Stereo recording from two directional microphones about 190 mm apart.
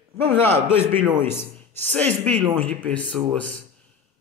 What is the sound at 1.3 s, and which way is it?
Speech, 10° left (ahead or behind).